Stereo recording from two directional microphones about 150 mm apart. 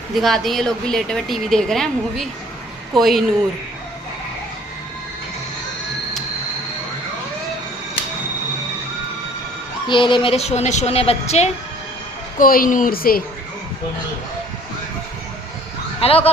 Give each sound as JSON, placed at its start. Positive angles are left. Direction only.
{"t": 0.1, "sound": "a woman's voice", "side_deg": 0}
{"t": 9.9, "sound": "a woman's voice", "side_deg": 30}
{"t": 12.4, "sound": "speech", "side_deg": 70}
{"t": 16.0, "sound": "speech", "side_deg": 40}